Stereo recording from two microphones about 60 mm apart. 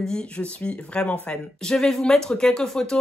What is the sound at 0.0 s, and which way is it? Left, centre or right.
Speech, centre.